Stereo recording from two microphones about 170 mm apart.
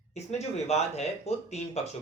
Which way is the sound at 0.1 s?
40° left (ahead or behind).